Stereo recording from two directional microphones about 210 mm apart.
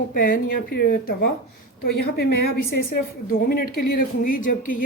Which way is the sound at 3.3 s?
45° left (ahead or behind).